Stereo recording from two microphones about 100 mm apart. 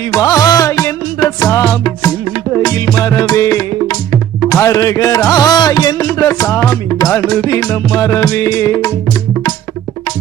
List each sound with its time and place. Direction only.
0.1 s music: 35° left (ahead or behind)